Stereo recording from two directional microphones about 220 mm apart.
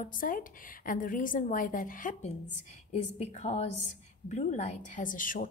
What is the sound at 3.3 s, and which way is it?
A woman's voice, 30° left (ahead or behind).